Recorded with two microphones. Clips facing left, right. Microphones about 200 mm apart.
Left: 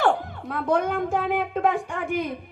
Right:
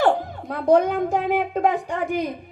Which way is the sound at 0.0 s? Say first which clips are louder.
Right 3 dB; 40° right (ahead or behind).